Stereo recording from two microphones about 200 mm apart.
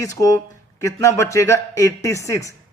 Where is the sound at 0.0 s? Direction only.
15° left (ahead or behind).